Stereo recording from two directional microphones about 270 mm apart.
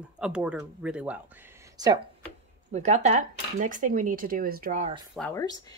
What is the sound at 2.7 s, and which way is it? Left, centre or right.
Speech, right.